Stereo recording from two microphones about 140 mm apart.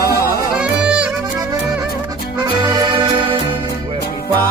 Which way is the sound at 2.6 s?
30° right (ahead or behind).